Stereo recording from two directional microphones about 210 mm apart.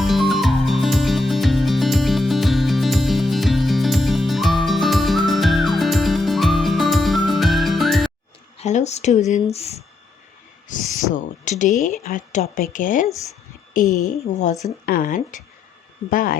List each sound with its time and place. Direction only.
0.0 s music: centre (ahead or behind)
8.5 s speech: 35° left (ahead or behind)
11.1 s speech: 40° left (ahead or behind)